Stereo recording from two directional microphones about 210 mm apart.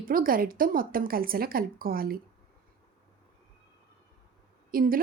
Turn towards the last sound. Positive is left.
turn(degrees=-45)  # may be behind; listen again after turning